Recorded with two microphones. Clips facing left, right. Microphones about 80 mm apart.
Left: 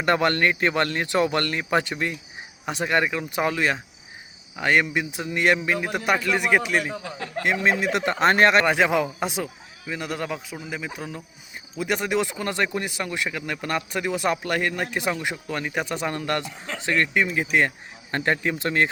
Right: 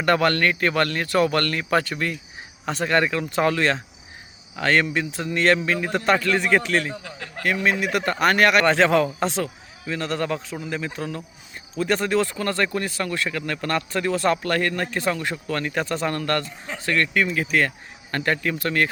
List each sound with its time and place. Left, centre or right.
0.0 s a man's voice: left
8.6 s a man's voice: centre